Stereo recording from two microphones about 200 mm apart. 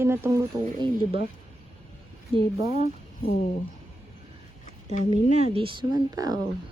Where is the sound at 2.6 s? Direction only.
35° left (ahead or behind).